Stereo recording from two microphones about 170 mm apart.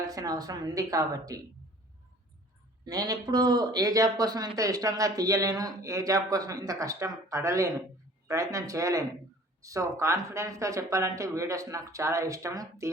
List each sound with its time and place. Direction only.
0.0 s speech: 20° right (ahead or behind)
2.8 s speech: 20° right (ahead or behind)